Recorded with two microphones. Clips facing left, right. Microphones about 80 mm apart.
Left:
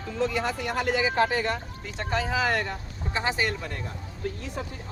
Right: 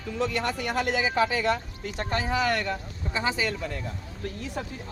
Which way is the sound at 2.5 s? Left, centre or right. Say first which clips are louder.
Even; right.